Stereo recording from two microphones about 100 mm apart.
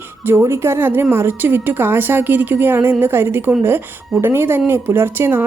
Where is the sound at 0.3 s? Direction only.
25° right (ahead or behind).